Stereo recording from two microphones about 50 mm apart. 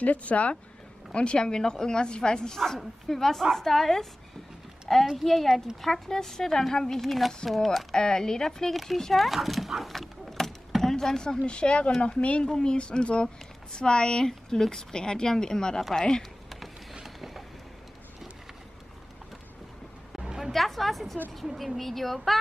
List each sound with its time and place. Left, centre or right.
0.0 s speech: left; by 4.1 s centre
5.1 s speech: centre
7.9 s speech: centre
17.0 s vehicle: centre
20.2 s a sound: centre
20.5 s speech: centre